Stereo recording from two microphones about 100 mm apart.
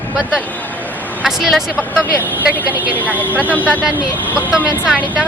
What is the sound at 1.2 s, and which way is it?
Speech, 5° right (ahead or behind).